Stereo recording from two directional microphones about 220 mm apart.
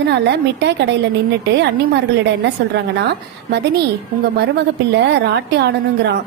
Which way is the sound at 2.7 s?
50° right (ahead or behind).